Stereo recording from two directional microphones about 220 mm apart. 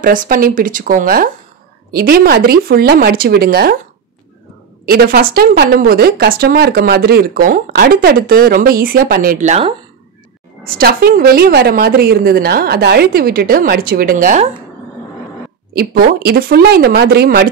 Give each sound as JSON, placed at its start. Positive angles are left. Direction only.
{"t": 0.0, "sound": "a woman's voice", "side_deg": -40}
{"t": 4.8, "sound": "a woman's voice", "side_deg": -45}
{"t": 10.6, "sound": "a woman's voice", "side_deg": -40}
{"t": 15.7, "sound": "a woman's voice", "side_deg": -45}